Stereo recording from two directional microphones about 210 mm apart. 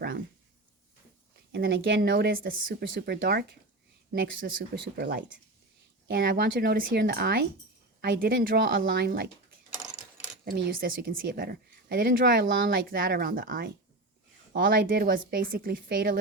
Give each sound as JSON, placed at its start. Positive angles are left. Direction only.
{"t": 1.5, "sound": "a woman's voice", "side_deg": -45}
{"t": 10.4, "sound": "a woman's voice", "side_deg": -45}